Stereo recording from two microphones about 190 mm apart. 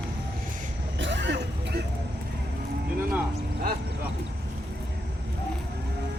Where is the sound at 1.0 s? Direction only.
75° right (ahead or behind).